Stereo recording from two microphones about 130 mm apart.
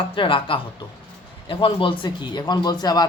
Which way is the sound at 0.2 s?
40° left (ahead or behind).